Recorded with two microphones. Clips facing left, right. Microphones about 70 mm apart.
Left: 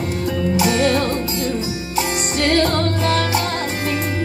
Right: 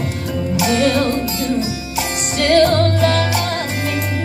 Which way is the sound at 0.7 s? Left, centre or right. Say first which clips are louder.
Right 4 dB; left.